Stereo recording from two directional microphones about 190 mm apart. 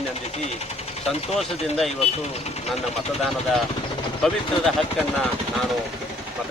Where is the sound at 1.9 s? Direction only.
35° left (ahead or behind).